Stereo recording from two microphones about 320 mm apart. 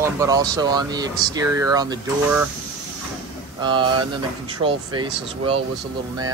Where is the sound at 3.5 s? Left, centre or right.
Centre.